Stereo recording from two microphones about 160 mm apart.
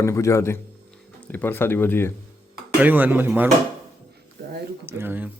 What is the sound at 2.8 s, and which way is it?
Speech, 10° right (ahead or behind).